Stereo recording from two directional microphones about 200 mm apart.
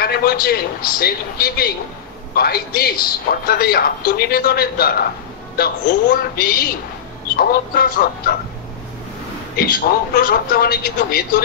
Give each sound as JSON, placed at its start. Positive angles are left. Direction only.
{"t": 0.0, "sound": "a man's voice", "side_deg": 50}
{"t": 10.1, "sound": "a man's voice", "side_deg": 50}